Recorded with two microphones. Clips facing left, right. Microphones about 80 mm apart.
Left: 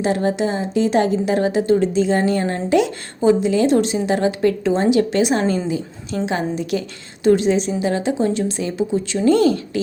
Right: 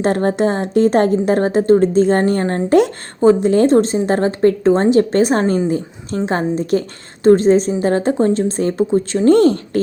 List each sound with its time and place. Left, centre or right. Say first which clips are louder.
0.0 s a woman's voice: right 3 dB; right